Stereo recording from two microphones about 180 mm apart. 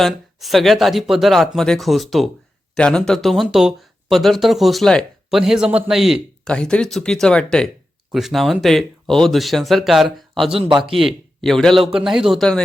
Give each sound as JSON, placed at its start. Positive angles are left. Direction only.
{"t": 0.0, "sound": "speech", "side_deg": 0}
{"t": 10.7, "sound": "a man's voice", "side_deg": -25}
{"t": 10.9, "sound": "speech", "side_deg": 0}